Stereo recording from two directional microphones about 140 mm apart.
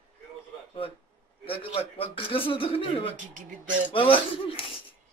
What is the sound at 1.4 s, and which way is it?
Speech, 40° left (ahead or behind).